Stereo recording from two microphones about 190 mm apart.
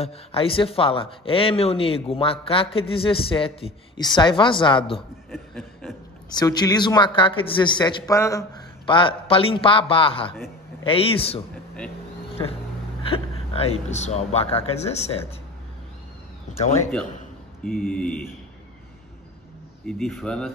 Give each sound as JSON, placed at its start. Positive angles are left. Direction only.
{"t": 0.0, "sound": "a man's voice", "side_deg": 30}
{"t": 5.3, "sound": "chuckle", "side_deg": 0}
{"t": 6.3, "sound": "a man's voice", "side_deg": 20}
{"t": 13.1, "sound": "speech", "side_deg": 35}
{"t": 17.6, "sound": "speech", "side_deg": 50}
{"t": 17.9, "sound": "a man's voice", "side_deg": 5}
{"t": 19.9, "sound": "speech", "side_deg": 0}